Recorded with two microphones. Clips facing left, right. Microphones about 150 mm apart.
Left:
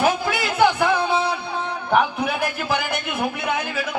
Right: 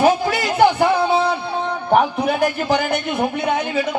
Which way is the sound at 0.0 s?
35° right (ahead or behind).